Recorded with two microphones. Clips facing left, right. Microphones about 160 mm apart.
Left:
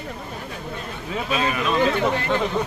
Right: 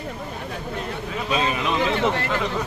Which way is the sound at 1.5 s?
20° right (ahead or behind).